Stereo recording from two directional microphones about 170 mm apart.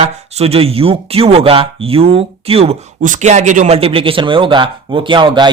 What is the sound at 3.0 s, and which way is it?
A man's voice, 45° right (ahead or behind).